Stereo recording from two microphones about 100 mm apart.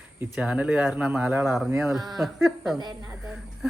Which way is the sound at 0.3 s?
10° right (ahead or behind).